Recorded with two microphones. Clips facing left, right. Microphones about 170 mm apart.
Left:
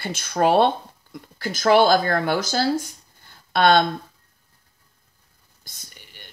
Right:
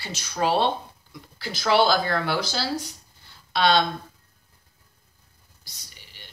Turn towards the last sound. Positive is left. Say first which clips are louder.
# left 3 dB
turn(degrees=50)  # may be behind; listen again after turning